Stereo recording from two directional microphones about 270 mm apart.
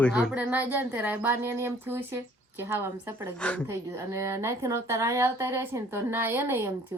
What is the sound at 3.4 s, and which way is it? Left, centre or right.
Speech, centre.